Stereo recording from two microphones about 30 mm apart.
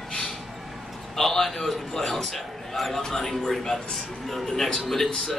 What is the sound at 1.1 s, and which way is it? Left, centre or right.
A man's voice, centre.